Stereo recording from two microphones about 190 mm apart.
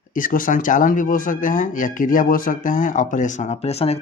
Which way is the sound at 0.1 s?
45° left (ahead or behind).